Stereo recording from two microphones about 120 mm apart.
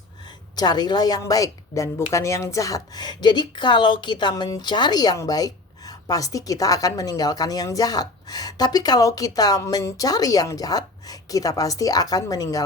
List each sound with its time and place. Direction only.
0.5 s a woman's voice: 35° left (ahead or behind)